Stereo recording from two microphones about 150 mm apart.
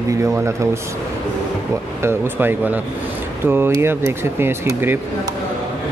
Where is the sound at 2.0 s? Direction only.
15° right (ahead or behind).